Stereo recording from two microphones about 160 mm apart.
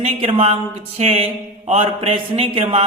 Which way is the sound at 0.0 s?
40° right (ahead or behind).